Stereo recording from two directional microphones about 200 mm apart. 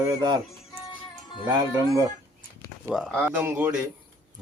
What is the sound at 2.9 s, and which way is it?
Speech, centre (ahead or behind).